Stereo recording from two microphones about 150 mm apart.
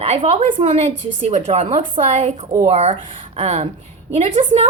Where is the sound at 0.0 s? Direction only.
45° right (ahead or behind).